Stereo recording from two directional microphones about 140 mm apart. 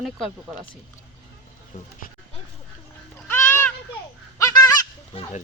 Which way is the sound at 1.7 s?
70° left (ahead or behind).